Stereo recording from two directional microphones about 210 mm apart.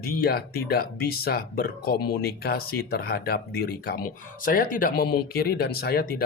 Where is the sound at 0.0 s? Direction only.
45° left (ahead or behind).